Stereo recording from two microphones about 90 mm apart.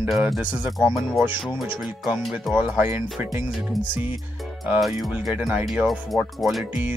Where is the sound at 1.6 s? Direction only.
Centre (ahead or behind).